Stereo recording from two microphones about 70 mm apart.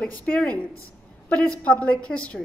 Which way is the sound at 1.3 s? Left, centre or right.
Centre.